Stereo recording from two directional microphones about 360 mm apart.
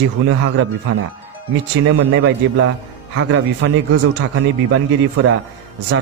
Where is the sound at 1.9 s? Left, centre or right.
Right.